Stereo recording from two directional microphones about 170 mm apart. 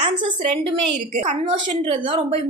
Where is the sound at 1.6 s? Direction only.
30° right (ahead or behind).